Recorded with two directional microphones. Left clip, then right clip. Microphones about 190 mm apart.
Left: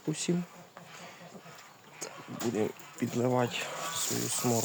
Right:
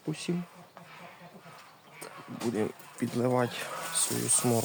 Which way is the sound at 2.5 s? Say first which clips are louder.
Even; 10° right (ahead or behind).